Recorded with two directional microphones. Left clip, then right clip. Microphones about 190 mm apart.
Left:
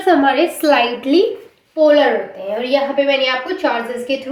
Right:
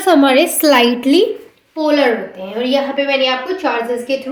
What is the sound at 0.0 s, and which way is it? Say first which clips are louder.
A woman's voice: right 2 dB; 60° right (ahead or behind).